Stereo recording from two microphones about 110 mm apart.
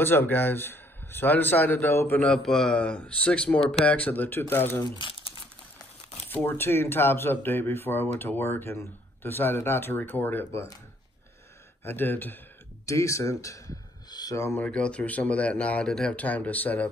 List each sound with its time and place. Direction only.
0.0 s speech: 20° left (ahead or behind)
2.2 s speech: 5° left (ahead or behind)
6.2 s speech: 15° left (ahead or behind)
11.8 s speech: 20° left (ahead or behind)
12.8 s speech: 30° left (ahead or behind)
14.6 s speech: 10° left (ahead or behind)